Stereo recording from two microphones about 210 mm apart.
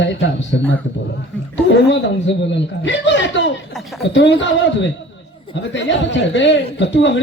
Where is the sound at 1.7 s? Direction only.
55° left (ahead or behind).